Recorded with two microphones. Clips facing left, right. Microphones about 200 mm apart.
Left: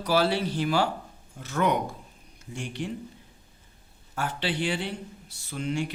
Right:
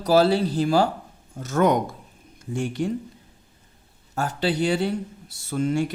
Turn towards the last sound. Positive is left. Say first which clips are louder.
# right 7 dB
turn(degrees=-45)  # may be behind; listen again after turning